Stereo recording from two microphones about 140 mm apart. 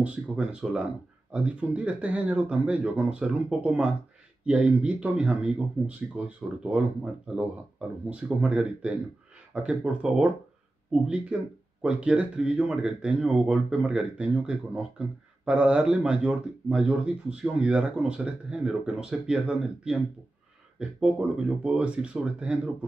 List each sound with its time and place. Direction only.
0.0 s speech: 5° right (ahead or behind)